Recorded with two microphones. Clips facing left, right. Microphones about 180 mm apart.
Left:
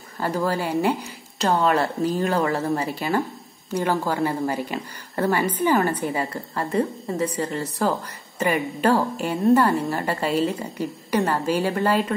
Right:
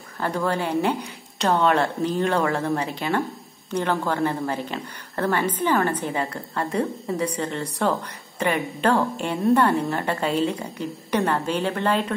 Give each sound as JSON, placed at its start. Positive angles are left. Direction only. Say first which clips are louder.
{"t": 0.2, "sound": "a woman's voice", "louder": "left 1 dB", "side_deg": 5}